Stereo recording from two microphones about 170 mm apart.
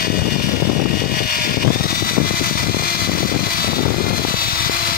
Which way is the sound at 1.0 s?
60° left (ahead or behind).